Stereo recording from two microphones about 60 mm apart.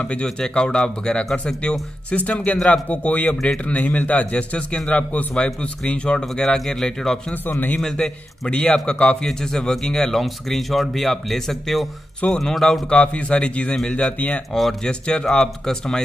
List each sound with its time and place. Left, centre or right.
0.0 s a man's voice: centre
12.9 s a man's voice: centre